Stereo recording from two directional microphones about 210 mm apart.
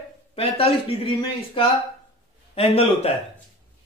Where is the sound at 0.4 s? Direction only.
30° left (ahead or behind).